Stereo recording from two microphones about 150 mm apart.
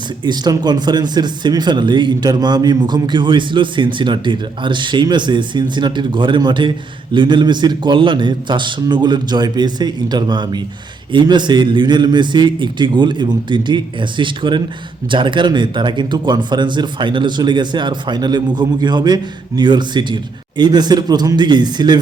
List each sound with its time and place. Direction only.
0.3 s speech: 30° right (ahead or behind)